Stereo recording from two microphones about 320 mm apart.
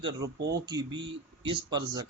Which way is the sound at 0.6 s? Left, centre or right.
Centre.